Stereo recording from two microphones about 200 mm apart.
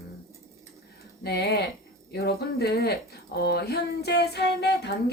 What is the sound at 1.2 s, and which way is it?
Speech, 55° left (ahead or behind).